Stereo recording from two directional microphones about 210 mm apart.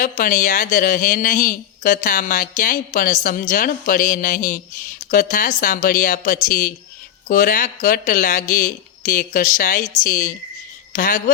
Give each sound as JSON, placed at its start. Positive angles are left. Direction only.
{"t": 0.0, "sound": "speech", "side_deg": 40}